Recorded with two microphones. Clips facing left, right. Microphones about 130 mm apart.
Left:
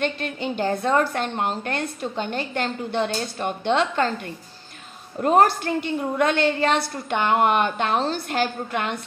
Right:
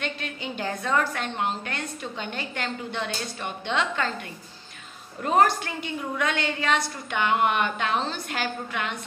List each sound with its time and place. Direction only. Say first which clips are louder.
0.0 s a woman's voice: left 7 dB; 40° left (ahead or behind)
1.3 s a woman's voice: left 4 dB; 45° left (ahead or behind)
5.2 s a woman's voice: left 4 dB; 45° left (ahead or behind)